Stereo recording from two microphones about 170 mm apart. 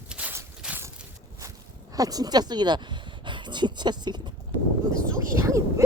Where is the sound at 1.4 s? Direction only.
20° right (ahead or behind).